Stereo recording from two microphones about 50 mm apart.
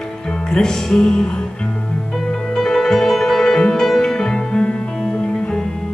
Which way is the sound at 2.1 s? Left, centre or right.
Centre.